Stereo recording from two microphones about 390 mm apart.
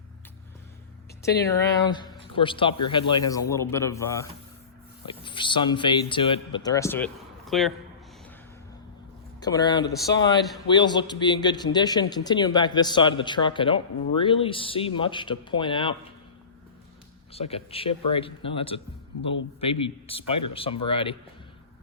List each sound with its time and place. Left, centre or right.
1.5 s a man's voice: centre
9.4 s a man's voice: centre
9.8 s speech: left
10.7 s a man's voice: centre
17.3 s a man's voice: centre